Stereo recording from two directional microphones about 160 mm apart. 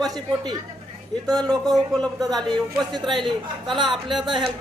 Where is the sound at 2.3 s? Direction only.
Centre (ahead or behind).